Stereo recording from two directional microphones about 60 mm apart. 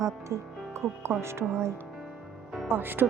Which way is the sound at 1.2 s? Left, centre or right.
Right.